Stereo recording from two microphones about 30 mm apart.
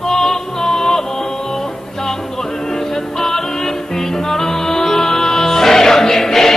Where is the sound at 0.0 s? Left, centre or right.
Centre.